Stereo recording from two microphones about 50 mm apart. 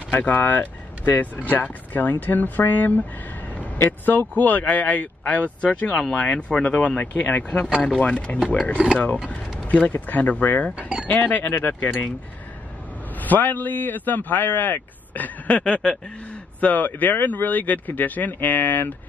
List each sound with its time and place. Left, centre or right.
0.1 s a man's voice: left
4.0 s a man's voice: left
13.2 s a man's voice: left
16.5 s a man's voice: left